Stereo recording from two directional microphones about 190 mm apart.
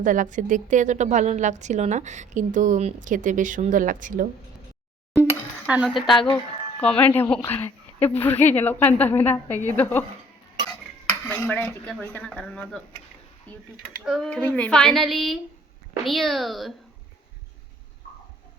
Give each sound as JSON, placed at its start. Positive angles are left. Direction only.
{"t": 0.0, "sound": "a woman's voice", "side_deg": -45}
{"t": 5.1, "sound": "a sound", "side_deg": -5}
{"t": 6.3, "sound": "a woman's voice", "side_deg": 5}